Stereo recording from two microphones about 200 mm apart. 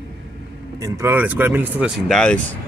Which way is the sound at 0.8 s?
15° right (ahead or behind).